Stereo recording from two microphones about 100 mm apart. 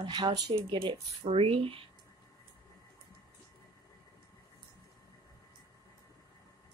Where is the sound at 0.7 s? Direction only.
60° right (ahead or behind).